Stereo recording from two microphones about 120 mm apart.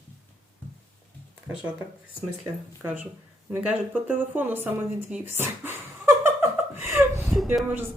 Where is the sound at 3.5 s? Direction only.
15° right (ahead or behind).